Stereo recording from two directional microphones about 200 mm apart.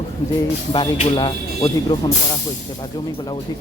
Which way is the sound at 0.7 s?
25° left (ahead or behind).